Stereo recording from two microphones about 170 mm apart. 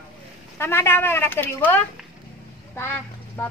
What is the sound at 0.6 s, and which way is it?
A woman's voice, 15° left (ahead or behind).